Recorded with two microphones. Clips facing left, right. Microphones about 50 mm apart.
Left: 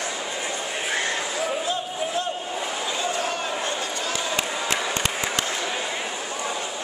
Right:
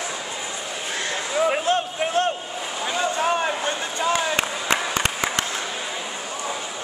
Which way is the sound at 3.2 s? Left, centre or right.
Right.